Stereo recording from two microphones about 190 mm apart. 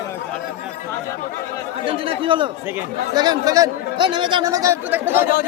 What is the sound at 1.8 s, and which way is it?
Speech, 30° right (ahead or behind).